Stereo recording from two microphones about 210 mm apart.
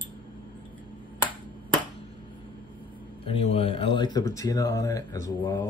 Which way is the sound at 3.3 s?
25° left (ahead or behind).